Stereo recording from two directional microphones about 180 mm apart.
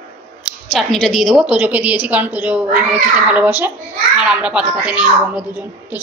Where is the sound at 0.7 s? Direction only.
Centre (ahead or behind).